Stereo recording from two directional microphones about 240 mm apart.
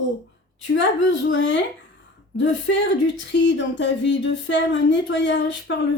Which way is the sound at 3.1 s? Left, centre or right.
Left.